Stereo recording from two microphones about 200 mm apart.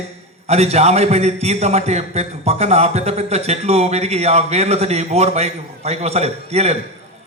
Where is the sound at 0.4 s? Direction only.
30° right (ahead or behind).